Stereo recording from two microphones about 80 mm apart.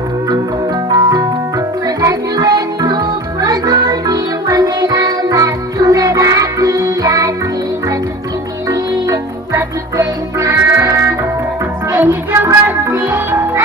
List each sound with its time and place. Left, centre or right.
1.9 s music: right
8.6 s music: right
11.9 s music: right